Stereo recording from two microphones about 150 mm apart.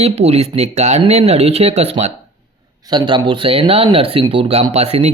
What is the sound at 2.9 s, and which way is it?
Speech, 30° right (ahead or behind).